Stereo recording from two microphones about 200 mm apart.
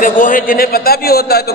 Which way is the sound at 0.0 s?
40° left (ahead or behind).